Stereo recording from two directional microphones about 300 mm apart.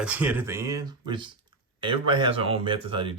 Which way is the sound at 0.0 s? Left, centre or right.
Centre.